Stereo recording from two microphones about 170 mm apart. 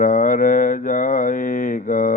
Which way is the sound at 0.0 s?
50° left (ahead or behind).